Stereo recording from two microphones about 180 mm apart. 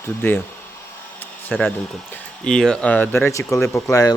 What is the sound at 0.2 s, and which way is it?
Speech, 10° left (ahead or behind).